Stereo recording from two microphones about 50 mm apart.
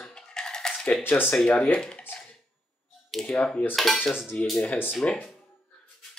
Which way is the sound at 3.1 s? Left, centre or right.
Centre.